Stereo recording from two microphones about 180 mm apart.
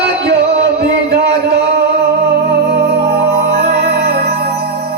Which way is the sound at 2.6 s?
65° right (ahead or behind).